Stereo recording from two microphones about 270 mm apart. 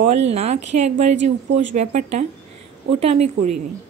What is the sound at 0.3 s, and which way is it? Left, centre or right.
A woman's voice, right.